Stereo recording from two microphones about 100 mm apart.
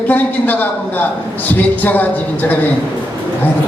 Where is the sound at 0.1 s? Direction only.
15° left (ahead or behind).